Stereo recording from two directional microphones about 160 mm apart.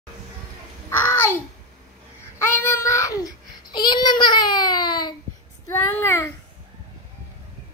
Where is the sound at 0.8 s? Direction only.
15° left (ahead or behind).